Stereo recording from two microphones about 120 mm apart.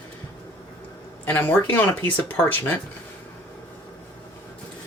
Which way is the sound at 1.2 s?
15° left (ahead or behind).